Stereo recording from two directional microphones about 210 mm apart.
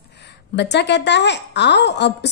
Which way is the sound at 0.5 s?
55° left (ahead or behind).